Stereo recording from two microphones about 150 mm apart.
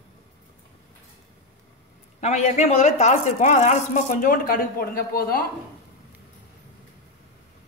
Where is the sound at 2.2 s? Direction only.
50° left (ahead or behind); by 5.4 s 80° left.